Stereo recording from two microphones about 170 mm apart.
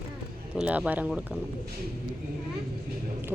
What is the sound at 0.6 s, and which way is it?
Speech, 10° right (ahead or behind).